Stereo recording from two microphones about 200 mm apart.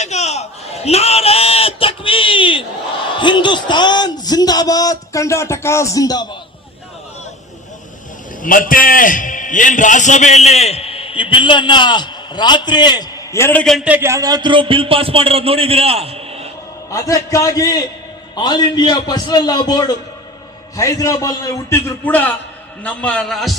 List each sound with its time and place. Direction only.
0.0 s a sound: 35° left (ahead or behind); by 6.2 s 20° left (ahead or behind)
8.4 s a man's voice: 40° left (ahead or behind); by 16.5 s 30° right (ahead or behind)
16.9 s a man's voice: 15° left (ahead or behind); by 23.6 s centre (ahead or behind)